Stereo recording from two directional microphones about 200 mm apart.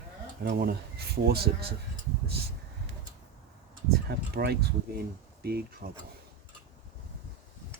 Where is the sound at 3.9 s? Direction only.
50° right (ahead or behind).